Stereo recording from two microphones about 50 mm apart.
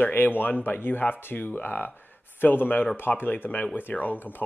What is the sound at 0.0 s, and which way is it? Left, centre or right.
Speech, left.